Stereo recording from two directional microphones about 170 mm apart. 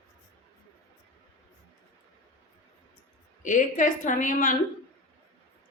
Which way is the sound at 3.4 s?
45° left (ahead or behind).